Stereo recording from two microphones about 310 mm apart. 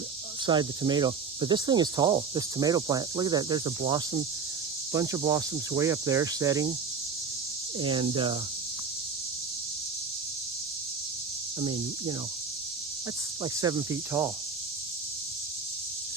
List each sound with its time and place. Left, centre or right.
0.4 s speech: centre
7.8 s speech: centre
11.6 s speech: centre
13.4 s speech: centre